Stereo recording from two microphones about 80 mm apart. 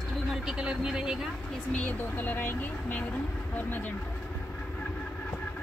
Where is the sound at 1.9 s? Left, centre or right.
Left.